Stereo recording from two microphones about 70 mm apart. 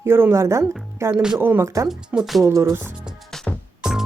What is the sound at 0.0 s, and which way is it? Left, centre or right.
Speech, right.